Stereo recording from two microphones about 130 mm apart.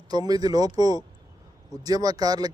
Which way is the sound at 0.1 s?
30° right (ahead or behind).